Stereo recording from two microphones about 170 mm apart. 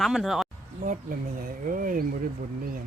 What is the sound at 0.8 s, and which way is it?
Speech, 55° right (ahead or behind).